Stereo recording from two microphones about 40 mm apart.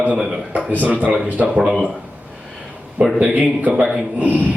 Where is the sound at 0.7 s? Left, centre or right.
Right.